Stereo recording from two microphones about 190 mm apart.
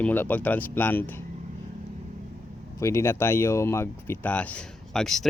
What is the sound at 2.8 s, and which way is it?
Speech, 15° left (ahead or behind).